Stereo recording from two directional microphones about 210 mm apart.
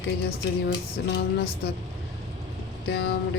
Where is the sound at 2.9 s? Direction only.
50° left (ahead or behind).